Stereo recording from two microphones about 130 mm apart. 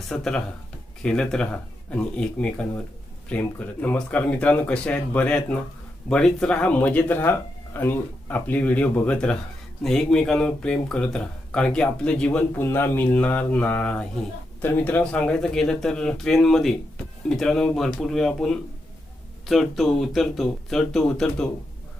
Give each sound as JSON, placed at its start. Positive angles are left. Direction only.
{"t": 0.1, "sound": "speech", "side_deg": 5}